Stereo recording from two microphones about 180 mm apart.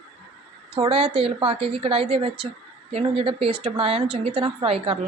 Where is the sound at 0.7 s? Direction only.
30° right (ahead or behind).